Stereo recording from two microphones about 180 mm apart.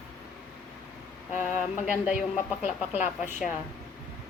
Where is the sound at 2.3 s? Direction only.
40° left (ahead or behind).